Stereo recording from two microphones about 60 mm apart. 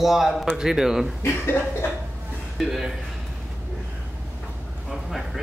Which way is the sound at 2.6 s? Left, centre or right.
Centre.